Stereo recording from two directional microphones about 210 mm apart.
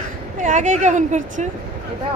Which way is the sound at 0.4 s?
35° right (ahead or behind).